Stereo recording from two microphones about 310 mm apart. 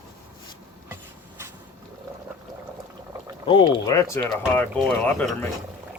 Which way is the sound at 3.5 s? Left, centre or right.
Centre.